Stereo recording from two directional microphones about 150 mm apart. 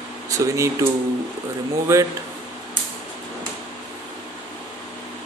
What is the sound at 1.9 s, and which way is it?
Speech, 15° right (ahead or behind).